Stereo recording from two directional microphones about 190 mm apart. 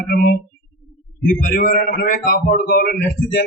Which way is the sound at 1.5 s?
50° left (ahead or behind).